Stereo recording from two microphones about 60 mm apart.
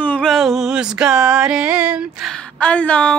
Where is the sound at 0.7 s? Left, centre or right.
Centre.